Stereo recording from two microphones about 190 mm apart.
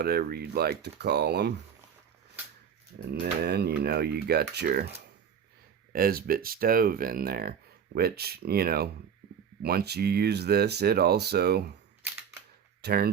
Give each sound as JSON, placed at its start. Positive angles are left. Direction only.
{"t": 0.0, "sound": "speech", "side_deg": -55}
{"t": 3.1, "sound": "speech", "side_deg": -55}
{"t": 5.9, "sound": "speech", "side_deg": -50}
{"t": 12.8, "sound": "speech", "side_deg": -55}